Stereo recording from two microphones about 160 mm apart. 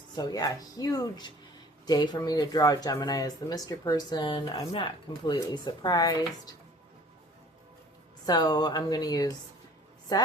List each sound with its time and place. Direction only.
0.2 s speech: 25° left (ahead or behind)
8.3 s speech: 25° left (ahead or behind)